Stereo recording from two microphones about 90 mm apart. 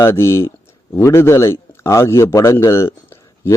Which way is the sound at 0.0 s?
30° left (ahead or behind).